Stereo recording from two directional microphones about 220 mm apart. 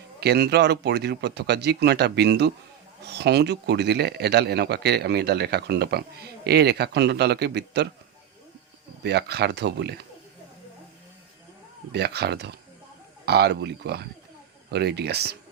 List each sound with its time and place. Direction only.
0.2 s speech: 45° right (ahead or behind)
9.0 s speech: 50° right (ahead or behind)
11.9 s speech: 50° right (ahead or behind)